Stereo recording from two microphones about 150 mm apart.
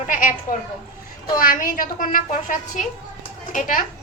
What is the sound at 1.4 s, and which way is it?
A woman's voice, 65° left (ahead or behind).